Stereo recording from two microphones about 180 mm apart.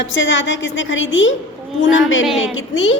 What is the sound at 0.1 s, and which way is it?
A woman's voice, 90° left.